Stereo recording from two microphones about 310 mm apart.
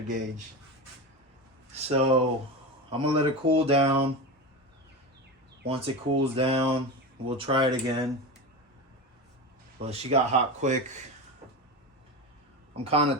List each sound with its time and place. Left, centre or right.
1.7 s speech: centre
5.6 s speech: centre
9.7 s speech: centre
12.7 s speech: centre